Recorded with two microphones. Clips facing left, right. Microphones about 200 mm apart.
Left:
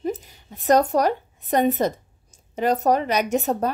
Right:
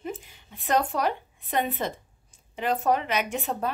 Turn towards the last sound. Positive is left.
turn(degrees=40)  # may be behind; listen again after turning